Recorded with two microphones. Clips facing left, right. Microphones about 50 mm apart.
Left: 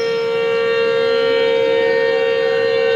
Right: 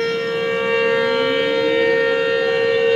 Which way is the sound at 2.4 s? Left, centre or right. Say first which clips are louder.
Left 1 dB; centre.